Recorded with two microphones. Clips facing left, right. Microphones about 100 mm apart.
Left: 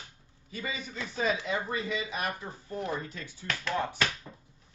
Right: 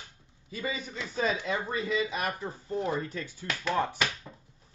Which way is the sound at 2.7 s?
25° right (ahead or behind).